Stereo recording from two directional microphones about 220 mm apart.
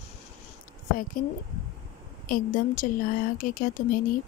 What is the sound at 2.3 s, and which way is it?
Speech, 40° left (ahead or behind).